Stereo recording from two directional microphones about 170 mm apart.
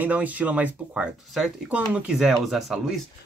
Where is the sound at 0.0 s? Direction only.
10° right (ahead or behind).